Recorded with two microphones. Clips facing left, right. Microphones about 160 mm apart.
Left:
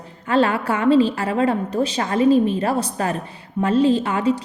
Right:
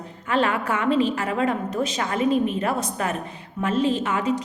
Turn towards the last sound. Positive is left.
turn(degrees=30)  # may be behind; listen again after turning